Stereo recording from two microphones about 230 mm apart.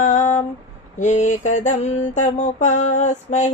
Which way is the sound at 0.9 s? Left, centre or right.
Left.